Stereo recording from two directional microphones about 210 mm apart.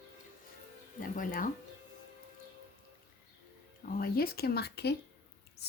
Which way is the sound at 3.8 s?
45° left (ahead or behind).